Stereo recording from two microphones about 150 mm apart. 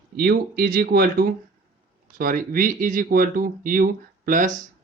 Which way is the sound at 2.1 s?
70° right (ahead or behind).